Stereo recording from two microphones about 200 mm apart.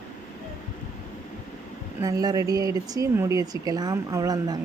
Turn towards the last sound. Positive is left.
turn(degrees=-20)  # may be behind; listen again after turning